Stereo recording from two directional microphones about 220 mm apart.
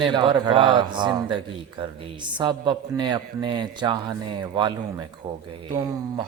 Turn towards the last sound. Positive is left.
turn(degrees=-20)  # may be behind; listen again after turning